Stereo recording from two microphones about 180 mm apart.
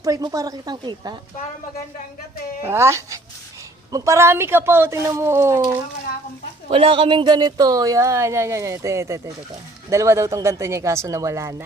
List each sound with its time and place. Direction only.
0.0 s a woman's voice: 20° right (ahead or behind)
2.6 s speech: 15° right (ahead or behind)
6.7 s speech: 30° right (ahead or behind); by 11.5 s 15° right (ahead or behind)